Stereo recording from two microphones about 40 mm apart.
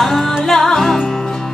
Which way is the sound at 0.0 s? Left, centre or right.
Centre.